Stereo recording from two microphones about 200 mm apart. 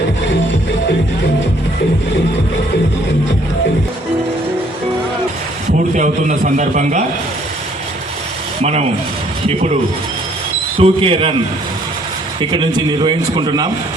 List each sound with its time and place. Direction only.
5.9 s a man's voice: 40° right (ahead or behind)
8.6 s a man's voice: 35° right (ahead or behind)
10.8 s a man's voice: 25° right (ahead or behind)
12.4 s a man's voice: 25° right (ahead or behind)